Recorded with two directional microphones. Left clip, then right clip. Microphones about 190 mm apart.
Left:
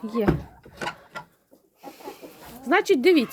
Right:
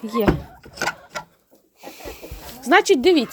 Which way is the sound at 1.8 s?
20° right (ahead or behind).